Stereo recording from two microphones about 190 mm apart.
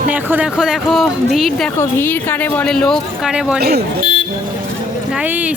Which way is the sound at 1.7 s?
10° left (ahead or behind).